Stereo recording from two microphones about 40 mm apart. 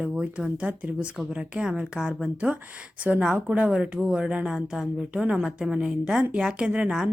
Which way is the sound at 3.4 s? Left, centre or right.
Right.